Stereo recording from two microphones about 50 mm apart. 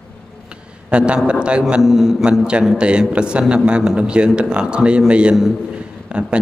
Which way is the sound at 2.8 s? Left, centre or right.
Right.